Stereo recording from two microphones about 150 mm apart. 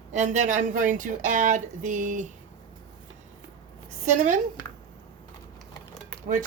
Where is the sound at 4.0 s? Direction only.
50° right (ahead or behind).